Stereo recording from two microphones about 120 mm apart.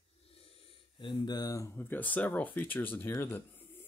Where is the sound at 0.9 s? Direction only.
40° left (ahead or behind).